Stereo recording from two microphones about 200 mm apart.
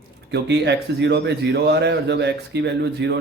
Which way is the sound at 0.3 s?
55° right (ahead or behind).